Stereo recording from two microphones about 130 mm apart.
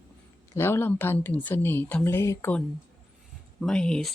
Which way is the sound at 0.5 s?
20° left (ahead or behind).